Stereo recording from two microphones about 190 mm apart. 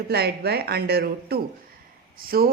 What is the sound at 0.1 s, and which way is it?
Speech, 55° right (ahead or behind).